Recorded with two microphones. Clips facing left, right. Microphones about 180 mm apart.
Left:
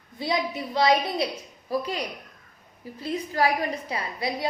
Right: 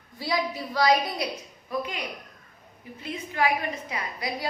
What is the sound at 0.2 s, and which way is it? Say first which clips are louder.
A woman's voice: left 1 dB; 20° left (ahead or behind).